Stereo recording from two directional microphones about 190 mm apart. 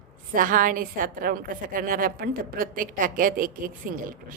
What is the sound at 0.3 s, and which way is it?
A woman's voice, 45° right (ahead or behind).